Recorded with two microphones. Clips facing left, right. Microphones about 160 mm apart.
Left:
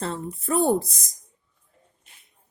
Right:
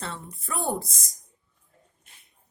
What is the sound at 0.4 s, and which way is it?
Speech, 40° left (ahead or behind).